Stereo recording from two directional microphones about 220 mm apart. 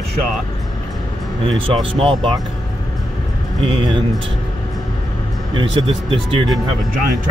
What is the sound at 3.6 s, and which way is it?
Speech, 20° right (ahead or behind).